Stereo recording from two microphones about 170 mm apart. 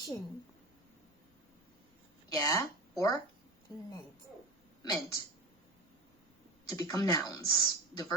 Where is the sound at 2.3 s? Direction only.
20° left (ahead or behind).